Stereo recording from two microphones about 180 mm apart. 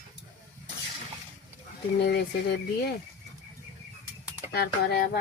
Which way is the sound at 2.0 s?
65° left (ahead or behind).